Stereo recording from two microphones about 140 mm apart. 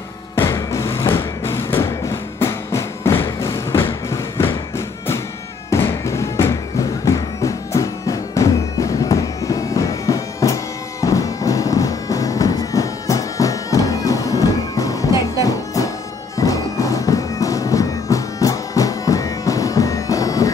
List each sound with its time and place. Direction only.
0.4 s music: 20° left (ahead or behind)